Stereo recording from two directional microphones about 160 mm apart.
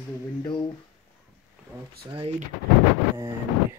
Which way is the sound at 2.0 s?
35° right (ahead or behind).